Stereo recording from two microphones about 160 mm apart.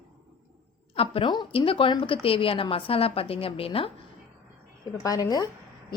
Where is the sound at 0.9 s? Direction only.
35° left (ahead or behind).